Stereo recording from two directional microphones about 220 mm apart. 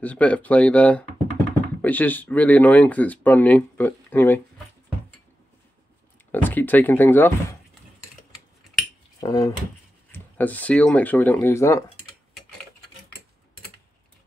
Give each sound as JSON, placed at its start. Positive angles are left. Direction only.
{"t": 0.0, "sound": "speech", "side_deg": 5}
{"t": 6.3, "sound": "speech", "side_deg": 10}
{"t": 9.2, "sound": "speech", "side_deg": 15}